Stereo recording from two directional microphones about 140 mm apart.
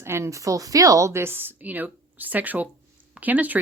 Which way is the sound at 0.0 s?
20° right (ahead or behind).